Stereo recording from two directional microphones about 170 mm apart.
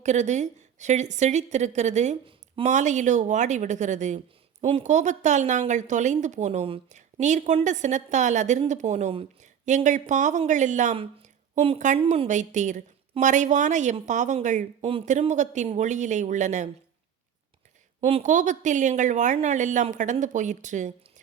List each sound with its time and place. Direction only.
0.0 s speech: 45° right (ahead or behind)
18.0 s speech: 45° right (ahead or behind)